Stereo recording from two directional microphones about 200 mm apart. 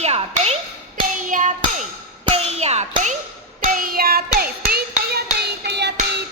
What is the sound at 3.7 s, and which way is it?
Clapping, 45° right (ahead or behind).